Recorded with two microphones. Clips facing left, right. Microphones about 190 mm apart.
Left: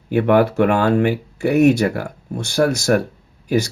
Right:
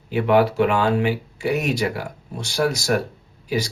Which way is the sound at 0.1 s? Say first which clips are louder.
Left 3 dB; 55° left (ahead or behind).